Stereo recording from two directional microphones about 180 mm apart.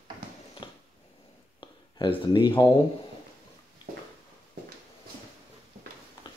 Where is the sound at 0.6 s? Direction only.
25° left (ahead or behind).